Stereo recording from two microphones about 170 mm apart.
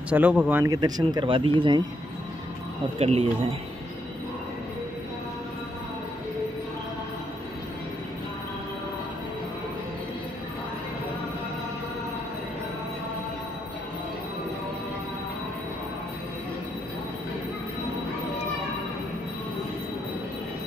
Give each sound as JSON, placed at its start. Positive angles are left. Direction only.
{"t": 0.1, "sound": "speech", "side_deg": -10}
{"t": 0.7, "sound": "speech", "side_deg": -25}
{"t": 3.0, "sound": "speech", "side_deg": -35}